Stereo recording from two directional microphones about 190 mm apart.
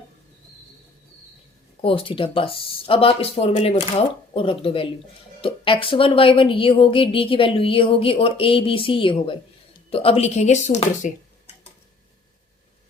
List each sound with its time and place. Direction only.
1.8 s speech: 30° left (ahead or behind)